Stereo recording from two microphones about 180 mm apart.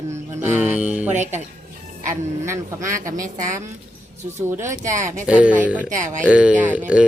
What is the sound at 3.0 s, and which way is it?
Speech, 45° right (ahead or behind).